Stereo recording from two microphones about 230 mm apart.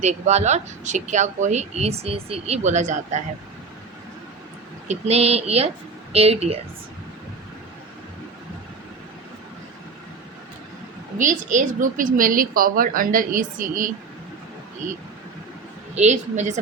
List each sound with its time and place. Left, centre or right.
0.0 s speech: right
4.9 s speech: right
11.2 s a woman's voice: right
16.0 s a woman's voice: right